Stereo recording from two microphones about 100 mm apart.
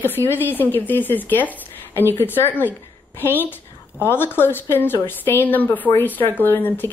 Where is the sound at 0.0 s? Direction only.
20° left (ahead or behind).